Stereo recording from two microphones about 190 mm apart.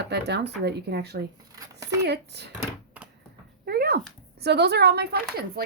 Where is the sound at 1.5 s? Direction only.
15° right (ahead or behind).